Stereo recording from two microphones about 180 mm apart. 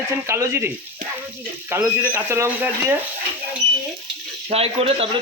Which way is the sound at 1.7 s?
15° right (ahead or behind).